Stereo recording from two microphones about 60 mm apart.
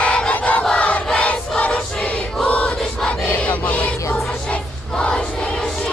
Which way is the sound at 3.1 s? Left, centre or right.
Left.